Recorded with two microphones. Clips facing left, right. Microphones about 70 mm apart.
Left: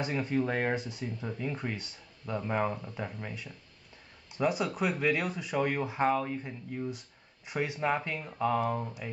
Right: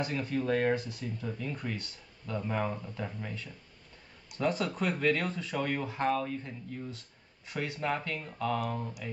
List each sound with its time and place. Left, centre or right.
0.0 s speech: left